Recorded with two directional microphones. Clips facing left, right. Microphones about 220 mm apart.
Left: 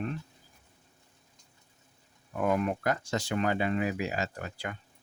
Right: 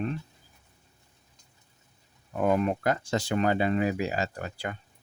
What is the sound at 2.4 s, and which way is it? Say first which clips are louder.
Speech: right 3 dB; 30° right (ahead or behind).